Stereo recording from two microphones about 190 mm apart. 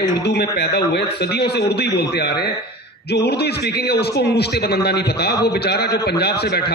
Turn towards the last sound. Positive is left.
turn(degrees=55)  # may be behind; listen again after turning